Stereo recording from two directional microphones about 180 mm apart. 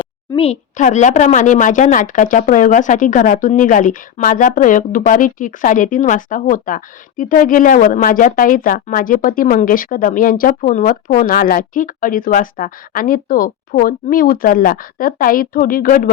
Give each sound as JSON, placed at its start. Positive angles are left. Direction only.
{"t": 0.3, "sound": "a woman's voice", "side_deg": 35}